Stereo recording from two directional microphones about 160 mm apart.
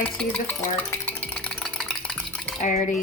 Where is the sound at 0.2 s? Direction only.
10° left (ahead or behind).